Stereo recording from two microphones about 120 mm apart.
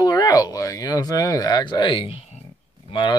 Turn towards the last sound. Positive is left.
turn(degrees=40)  # may be behind; listen again after turning